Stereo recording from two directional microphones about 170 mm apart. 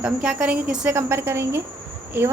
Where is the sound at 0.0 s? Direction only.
5° right (ahead or behind).